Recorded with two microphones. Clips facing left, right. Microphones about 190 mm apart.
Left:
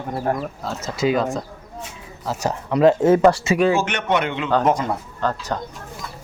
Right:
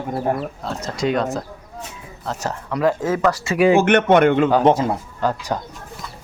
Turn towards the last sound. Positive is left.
turn(degrees=-10)  # may be behind; listen again after turning